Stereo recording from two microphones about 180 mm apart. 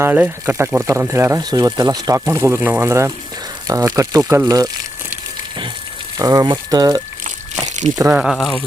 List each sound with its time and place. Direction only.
0.0 s speech: 10° right (ahead or behind)
6.1 s speech: 20° right (ahead or behind)
8.2 s speech: centre (ahead or behind)